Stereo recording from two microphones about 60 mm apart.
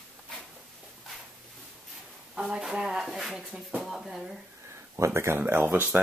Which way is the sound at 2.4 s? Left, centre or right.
Centre.